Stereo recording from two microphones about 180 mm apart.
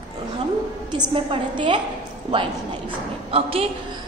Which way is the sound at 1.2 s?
25° right (ahead or behind).